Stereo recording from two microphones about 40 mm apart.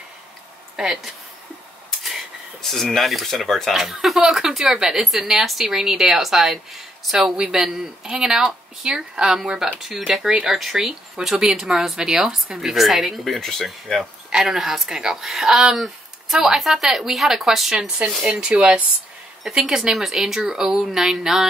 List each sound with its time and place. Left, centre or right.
0.7 s speech: centre
2.6 s a woman's voice: centre
7.2 s speech: centre
9.8 s a woman's voice: centre
13.2 s a woman's voice: centre
14.3 s a woman's voice: centre
17.7 s speech: right
18.4 s speech: right